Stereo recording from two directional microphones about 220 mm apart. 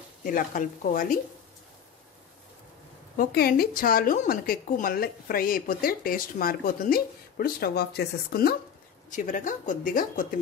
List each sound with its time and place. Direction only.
0.2 s a woman's voice: 40° left (ahead or behind)
3.2 s a woman's voice: 45° left (ahead or behind)